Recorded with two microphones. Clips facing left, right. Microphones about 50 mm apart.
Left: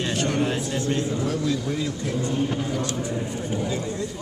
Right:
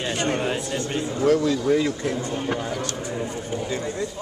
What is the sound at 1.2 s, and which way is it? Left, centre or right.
Speech, right.